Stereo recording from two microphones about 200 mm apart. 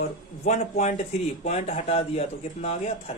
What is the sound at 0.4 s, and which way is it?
A woman's voice, 35° left (ahead or behind).